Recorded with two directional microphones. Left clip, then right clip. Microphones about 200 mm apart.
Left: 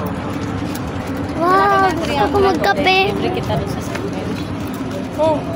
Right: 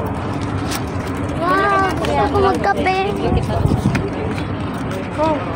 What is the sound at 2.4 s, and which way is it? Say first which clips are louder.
Speech: left 2 dB; 25° left (ahead or behind).